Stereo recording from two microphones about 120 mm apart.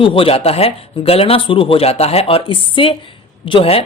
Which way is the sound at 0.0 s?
50° left (ahead or behind).